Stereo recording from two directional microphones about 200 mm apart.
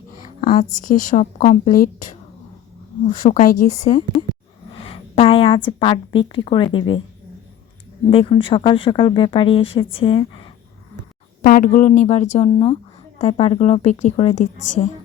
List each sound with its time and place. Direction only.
0.4 s a woman's voice: 40° left (ahead or behind)
3.1 s a woman's voice: 40° left (ahead or behind)
4.8 s a woman's voice: 25° left (ahead or behind)
8.1 s speech: 25° left (ahead or behind)
11.4 s a woman's voice: 45° left (ahead or behind)